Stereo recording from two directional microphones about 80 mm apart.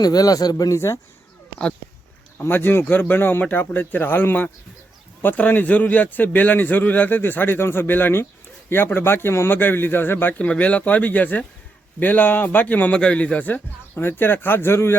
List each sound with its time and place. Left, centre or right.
0.0 s speech: left
2.4 s a man's voice: left